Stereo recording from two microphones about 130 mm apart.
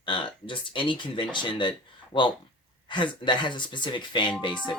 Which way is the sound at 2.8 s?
40° left (ahead or behind).